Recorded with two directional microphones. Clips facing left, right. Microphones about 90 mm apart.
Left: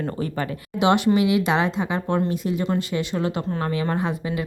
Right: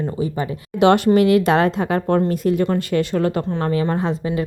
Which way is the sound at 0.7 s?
50° right (ahead or behind).